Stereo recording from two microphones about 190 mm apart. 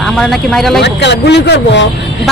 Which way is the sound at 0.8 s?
65° left (ahead or behind).